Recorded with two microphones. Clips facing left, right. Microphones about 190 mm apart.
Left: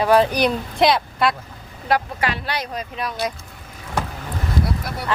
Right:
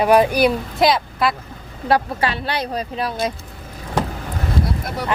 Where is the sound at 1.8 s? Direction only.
30° right (ahead or behind).